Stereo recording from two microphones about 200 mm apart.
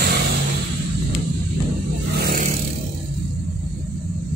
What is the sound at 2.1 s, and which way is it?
Vehicle, 45° right (ahead or behind).